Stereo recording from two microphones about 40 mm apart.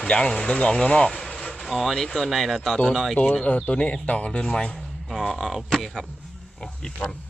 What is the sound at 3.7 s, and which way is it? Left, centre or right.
Speech, left.